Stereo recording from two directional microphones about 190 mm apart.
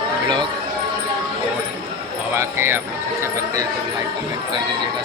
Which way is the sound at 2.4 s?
10° right (ahead or behind).